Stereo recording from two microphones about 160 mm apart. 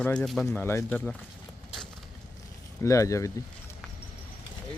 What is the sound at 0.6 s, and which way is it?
Speech, 15° left (ahead or behind).